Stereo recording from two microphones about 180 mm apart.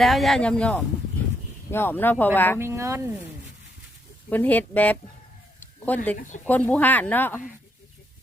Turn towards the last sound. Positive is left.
turn(degrees=10)  # may be behind; listen again after turning